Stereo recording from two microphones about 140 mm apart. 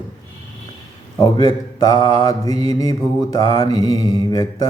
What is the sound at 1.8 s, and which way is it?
Mantra, 25° left (ahead or behind).